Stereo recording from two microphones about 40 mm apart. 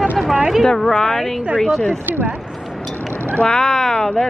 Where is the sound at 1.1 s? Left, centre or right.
Centre.